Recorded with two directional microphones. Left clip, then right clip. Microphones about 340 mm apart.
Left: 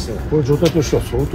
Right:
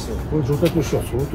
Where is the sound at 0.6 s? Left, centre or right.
Centre.